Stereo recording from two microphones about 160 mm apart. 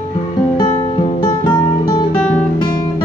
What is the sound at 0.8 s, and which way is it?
Music, 30° left (ahead or behind).